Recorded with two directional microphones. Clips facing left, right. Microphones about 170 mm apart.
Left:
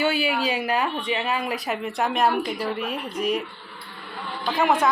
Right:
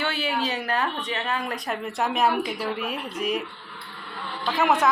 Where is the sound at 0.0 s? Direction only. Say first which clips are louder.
Left 4 dB; 10° left (ahead or behind).